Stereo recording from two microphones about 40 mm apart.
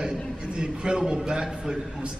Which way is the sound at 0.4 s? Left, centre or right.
Right.